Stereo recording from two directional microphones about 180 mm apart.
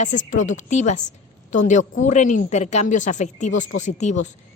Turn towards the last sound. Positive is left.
turn(degrees=40)  # may be behind; listen again after turning